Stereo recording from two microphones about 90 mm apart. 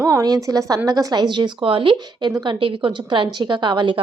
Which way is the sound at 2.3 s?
60° right (ahead or behind).